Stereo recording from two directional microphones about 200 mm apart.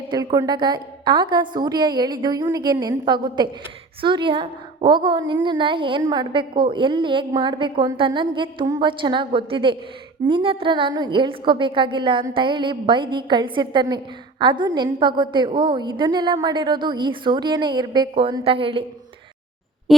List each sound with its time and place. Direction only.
0.1 s a woman's voice: 20° right (ahead or behind)
19.9 s music: centre (ahead or behind)